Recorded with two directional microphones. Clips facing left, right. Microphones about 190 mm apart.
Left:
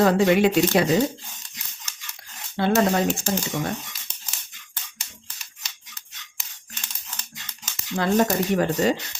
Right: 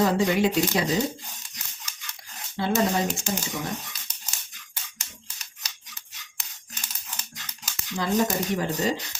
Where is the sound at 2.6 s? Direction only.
65° left (ahead or behind).